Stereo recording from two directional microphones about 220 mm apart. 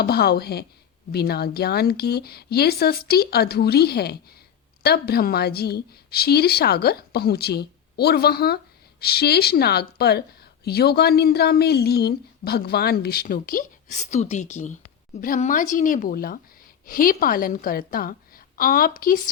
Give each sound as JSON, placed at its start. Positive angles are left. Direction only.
{"t": 0.0, "sound": "a woman's voice", "side_deg": 45}